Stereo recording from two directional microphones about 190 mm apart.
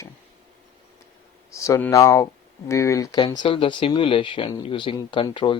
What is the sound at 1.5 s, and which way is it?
Speech, 15° left (ahead or behind).